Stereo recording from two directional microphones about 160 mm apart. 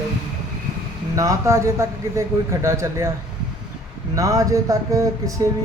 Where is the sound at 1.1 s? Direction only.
20° right (ahead or behind).